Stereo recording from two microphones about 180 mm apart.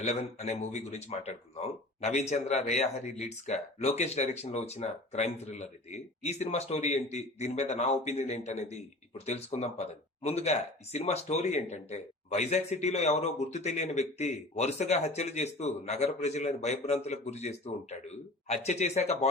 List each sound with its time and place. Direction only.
0.0 s speech: 35° left (ahead or behind)